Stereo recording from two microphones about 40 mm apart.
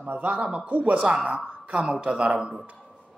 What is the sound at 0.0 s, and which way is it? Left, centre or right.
Speech, right.